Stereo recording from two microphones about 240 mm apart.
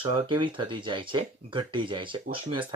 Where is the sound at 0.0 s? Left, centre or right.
Right.